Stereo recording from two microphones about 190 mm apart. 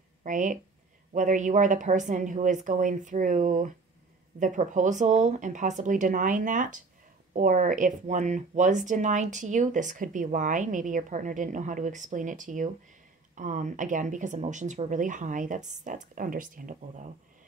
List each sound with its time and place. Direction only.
0.2 s speech: 40° right (ahead or behind)